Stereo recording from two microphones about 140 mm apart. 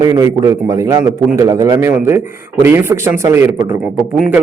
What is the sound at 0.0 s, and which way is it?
A man's voice, 25° right (ahead or behind).